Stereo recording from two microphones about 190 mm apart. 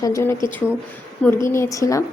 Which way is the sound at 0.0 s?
15° left (ahead or behind).